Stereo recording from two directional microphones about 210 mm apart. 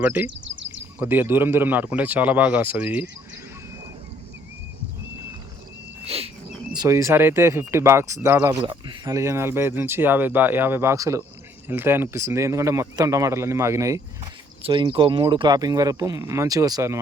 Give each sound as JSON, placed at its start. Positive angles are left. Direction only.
{"t": 0.0, "sound": "speech", "side_deg": -10}
{"t": 0.4, "sound": "a sound", "side_deg": -60}
{"t": 0.9, "sound": "speech", "side_deg": -10}
{"t": 6.1, "sound": "a sound", "side_deg": -30}
{"t": 6.7, "sound": "speech", "side_deg": -15}
{"t": 8.6, "sound": "speech", "side_deg": -20}